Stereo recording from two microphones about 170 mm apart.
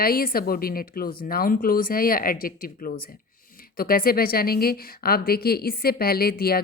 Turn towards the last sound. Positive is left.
turn(degrees=65)  # may be behind; listen again after turning